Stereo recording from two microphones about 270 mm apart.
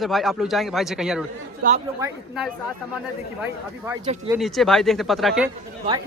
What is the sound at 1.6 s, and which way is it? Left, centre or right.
Speech, right.